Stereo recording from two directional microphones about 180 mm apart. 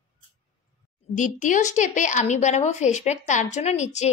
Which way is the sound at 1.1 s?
45° left (ahead or behind).